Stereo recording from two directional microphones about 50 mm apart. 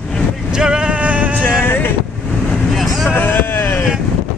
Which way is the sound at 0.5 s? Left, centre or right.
Centre.